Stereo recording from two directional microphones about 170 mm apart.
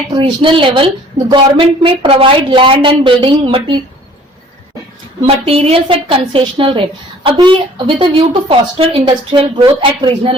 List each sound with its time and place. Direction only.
0.1 s a woman's voice: 30° right (ahead or behind)
5.2 s a woman's voice: 35° right (ahead or behind)